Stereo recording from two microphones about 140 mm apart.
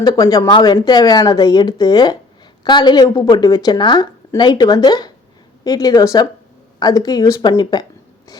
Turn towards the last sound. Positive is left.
turn(degrees=30)  # may be behind; listen again after turning